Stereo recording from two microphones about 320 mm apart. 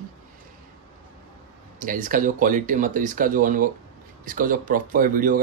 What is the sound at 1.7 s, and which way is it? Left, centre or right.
Speech, right.